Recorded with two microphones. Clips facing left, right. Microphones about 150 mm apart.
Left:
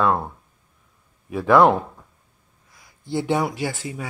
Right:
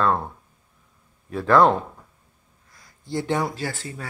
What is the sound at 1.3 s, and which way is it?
Speech, 10° left (ahead or behind).